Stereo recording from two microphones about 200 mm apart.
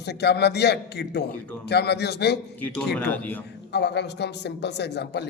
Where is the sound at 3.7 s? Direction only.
55° left (ahead or behind).